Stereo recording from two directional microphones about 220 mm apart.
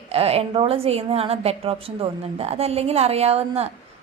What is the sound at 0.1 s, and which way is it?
A woman's voice, 30° right (ahead or behind).